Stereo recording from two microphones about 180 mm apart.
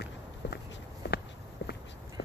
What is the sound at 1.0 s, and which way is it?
Walk, 65° left (ahead or behind).